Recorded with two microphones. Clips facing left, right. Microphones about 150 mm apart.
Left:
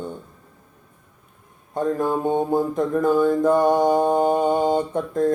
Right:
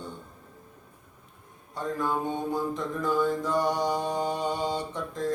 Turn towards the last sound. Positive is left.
turn(degrees=50)  # may be behind; listen again after turning